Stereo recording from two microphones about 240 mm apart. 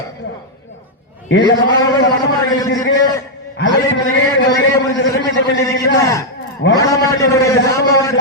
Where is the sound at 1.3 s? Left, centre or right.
Left.